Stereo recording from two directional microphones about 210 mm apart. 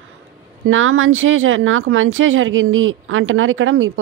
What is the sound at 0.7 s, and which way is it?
Speech, 70° right (ahead or behind).